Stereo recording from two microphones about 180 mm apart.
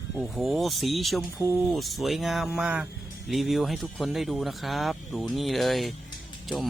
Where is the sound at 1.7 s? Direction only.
Centre (ahead or behind).